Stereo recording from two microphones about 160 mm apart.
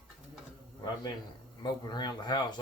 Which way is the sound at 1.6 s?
25° left (ahead or behind).